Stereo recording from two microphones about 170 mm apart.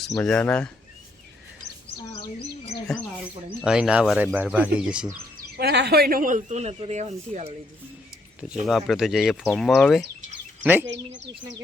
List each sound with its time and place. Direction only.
0.1 s speech: 10° left (ahead or behind)
3.6 s speech: 5° right (ahead or behind)
5.5 s speech: 75° right (ahead or behind); by 7.5 s 40° right (ahead or behind)
8.4 s speech: 5° right (ahead or behind)
10.6 s speech: 10° right (ahead or behind)
10.8 s speech: 90° right